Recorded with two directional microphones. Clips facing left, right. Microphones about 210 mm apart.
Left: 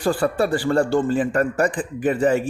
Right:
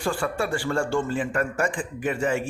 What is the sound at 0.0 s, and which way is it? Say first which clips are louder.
Speech: left 6 dB; 35° left (ahead or behind).